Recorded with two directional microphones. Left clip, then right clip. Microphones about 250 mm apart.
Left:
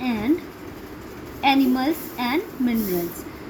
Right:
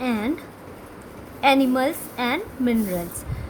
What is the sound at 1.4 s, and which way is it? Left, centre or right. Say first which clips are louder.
Speech: right 1 dB; right.